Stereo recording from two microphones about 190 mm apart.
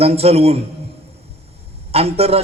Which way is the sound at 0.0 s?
30° right (ahead or behind).